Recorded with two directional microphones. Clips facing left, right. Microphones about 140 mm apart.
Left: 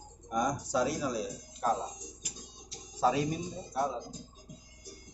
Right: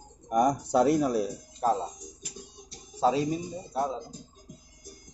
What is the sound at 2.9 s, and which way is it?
Speech, 25° right (ahead or behind).